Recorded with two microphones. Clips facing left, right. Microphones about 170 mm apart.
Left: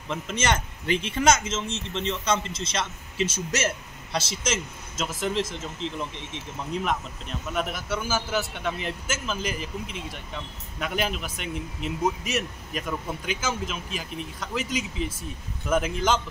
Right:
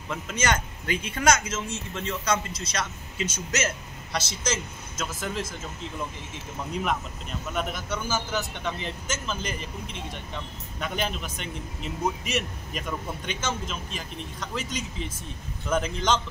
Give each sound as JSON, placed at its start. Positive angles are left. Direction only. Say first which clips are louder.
{"t": 0.1, "sound": "speech", "louder": "left 1 dB", "side_deg": 25}
{"t": 6.7, "sound": "speech", "louder": "left 1 dB", "side_deg": 0}